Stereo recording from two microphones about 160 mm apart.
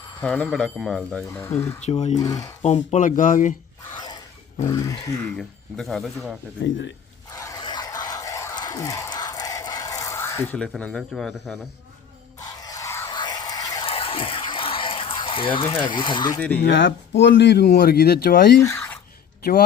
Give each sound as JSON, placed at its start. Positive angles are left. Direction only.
{"t": 0.2, "sound": "speech", "side_deg": 10}
{"t": 1.8, "sound": "speech", "side_deg": 45}
{"t": 2.2, "sound": "speech", "side_deg": 20}
{"t": 2.6, "sound": "speech", "side_deg": 45}
{"t": 4.7, "sound": "speech", "side_deg": 20}
{"t": 5.4, "sound": "speech", "side_deg": 0}
{"t": 7.3, "sound": "a sound", "side_deg": 20}
{"t": 12.4, "sound": "a sound", "side_deg": 25}
{"t": 13.8, "sound": "a sound", "side_deg": 35}
{"t": 15.7, "sound": "speech", "side_deg": 30}
{"t": 16.6, "sound": "speech", "side_deg": 90}